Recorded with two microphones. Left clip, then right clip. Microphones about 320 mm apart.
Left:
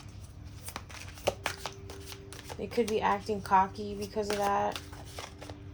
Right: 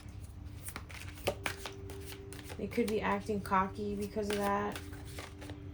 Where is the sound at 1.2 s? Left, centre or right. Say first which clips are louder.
Left 4 dB; centre.